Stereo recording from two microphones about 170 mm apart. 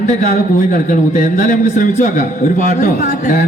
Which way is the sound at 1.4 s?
50° left (ahead or behind).